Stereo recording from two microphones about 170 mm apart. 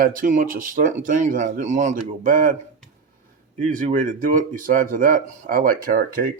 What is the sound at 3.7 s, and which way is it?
Speech, 50° right (ahead or behind).